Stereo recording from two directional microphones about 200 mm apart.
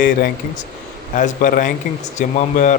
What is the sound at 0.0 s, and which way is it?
A man's voice, 40° left (ahead or behind).